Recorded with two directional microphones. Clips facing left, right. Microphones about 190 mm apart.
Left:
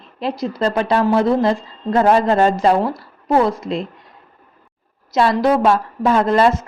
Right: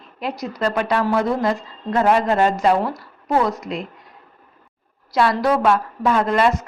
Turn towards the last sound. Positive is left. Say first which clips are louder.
# left 3 dB
turn(degrees=30)  # may be behind; listen again after turning